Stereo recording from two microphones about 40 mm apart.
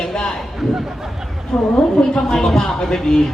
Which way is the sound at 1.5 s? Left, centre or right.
Centre.